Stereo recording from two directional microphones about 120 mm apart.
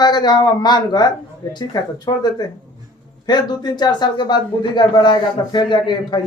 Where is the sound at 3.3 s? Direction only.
35° left (ahead or behind).